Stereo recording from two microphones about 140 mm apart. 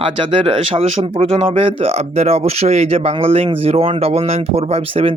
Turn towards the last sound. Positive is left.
turn(degrees=-45)  # may be behind; listen again after turning